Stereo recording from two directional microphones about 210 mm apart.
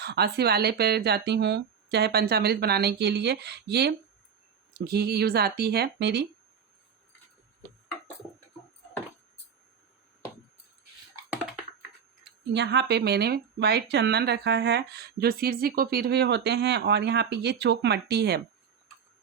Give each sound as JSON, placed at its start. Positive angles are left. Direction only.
{"t": 0.0, "sound": "speech", "side_deg": -50}
{"t": 12.5, "sound": "speech", "side_deg": -55}